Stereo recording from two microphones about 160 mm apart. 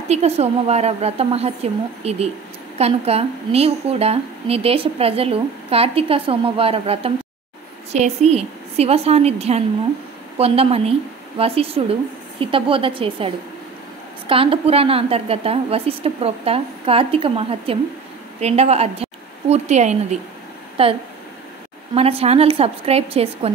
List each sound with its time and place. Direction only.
0.1 s a woman's voice: 40° right (ahead or behind)